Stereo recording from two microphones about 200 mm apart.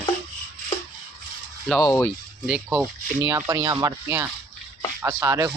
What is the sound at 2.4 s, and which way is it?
Speech, 5° right (ahead or behind).